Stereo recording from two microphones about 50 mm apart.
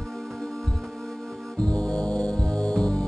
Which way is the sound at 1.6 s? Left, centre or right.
Centre.